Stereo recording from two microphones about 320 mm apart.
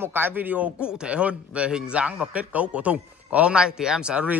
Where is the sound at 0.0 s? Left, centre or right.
Centre.